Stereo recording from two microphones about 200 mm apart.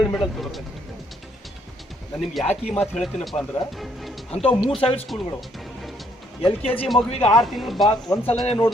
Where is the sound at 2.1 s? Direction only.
Centre (ahead or behind).